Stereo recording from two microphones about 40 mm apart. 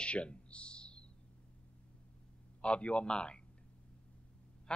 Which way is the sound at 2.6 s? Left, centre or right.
Left.